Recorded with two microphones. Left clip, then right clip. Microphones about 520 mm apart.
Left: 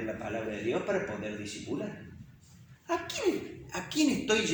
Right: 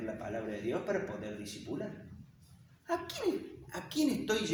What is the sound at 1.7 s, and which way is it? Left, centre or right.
Speech, right.